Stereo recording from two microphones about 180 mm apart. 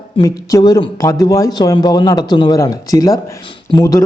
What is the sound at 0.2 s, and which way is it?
A man's voice, 20° left (ahead or behind).